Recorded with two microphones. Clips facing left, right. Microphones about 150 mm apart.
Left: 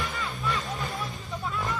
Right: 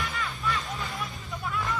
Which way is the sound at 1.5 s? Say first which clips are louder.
Right 1 dB; 20° left (ahead or behind).